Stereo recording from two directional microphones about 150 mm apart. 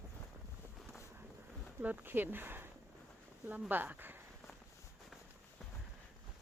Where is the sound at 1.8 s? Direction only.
10° right (ahead or behind).